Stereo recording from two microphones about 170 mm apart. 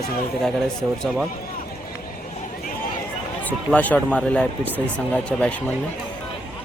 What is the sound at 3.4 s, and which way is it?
Speech, 10° left (ahead or behind).